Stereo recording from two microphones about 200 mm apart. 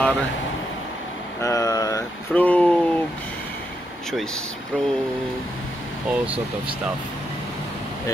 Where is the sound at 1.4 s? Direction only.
15° left (ahead or behind).